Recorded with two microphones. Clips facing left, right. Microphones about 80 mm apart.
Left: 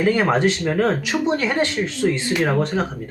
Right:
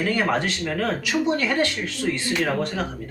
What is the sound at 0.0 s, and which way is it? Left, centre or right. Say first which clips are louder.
Speech: left 5 dB; left.